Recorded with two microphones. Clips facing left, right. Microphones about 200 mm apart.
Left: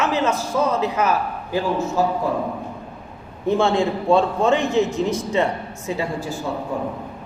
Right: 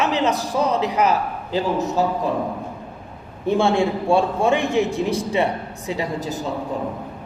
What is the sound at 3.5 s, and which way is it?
A man's voice, 15° right (ahead or behind).